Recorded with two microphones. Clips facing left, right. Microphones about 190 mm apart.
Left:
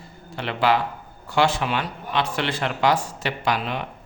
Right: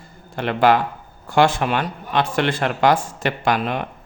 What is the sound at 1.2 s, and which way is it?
Speech, 50° right (ahead or behind).